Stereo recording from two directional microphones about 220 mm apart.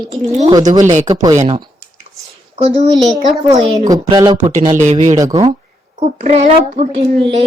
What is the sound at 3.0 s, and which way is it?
Speech, centre (ahead or behind).